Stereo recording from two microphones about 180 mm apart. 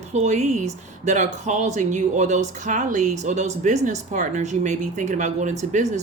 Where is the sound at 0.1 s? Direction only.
40° right (ahead or behind).